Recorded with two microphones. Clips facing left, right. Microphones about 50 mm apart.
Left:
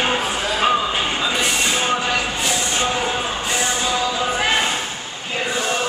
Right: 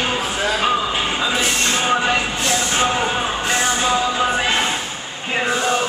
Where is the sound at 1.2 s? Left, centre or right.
Centre.